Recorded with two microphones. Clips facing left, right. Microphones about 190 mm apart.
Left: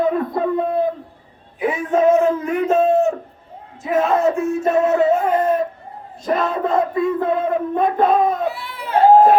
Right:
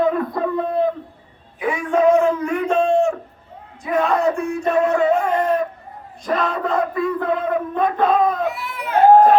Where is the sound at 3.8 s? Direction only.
25° left (ahead or behind).